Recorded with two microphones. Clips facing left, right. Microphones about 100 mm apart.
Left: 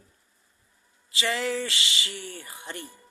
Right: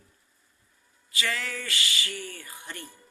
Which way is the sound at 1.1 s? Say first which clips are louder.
Left 5 dB; 20° left (ahead or behind).